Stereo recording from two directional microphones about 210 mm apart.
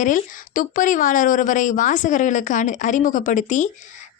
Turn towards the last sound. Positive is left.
turn(degrees=35)  # may be behind; listen again after turning